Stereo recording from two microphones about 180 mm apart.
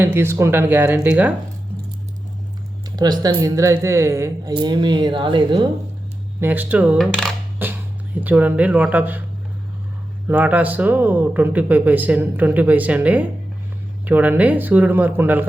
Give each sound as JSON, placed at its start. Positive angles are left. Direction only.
{"t": 0.0, "sound": "speech", "side_deg": -15}
{"t": 2.9, "sound": "a woman's voice", "side_deg": -20}
{"t": 6.4, "sound": "speech", "side_deg": -10}
{"t": 7.6, "sound": "music", "side_deg": -10}
{"t": 8.2, "sound": "speech", "side_deg": -10}
{"t": 10.2, "sound": "speech", "side_deg": -10}